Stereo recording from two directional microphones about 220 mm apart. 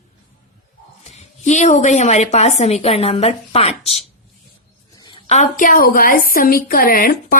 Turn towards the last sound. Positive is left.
turn(degrees=40)  # may be behind; listen again after turning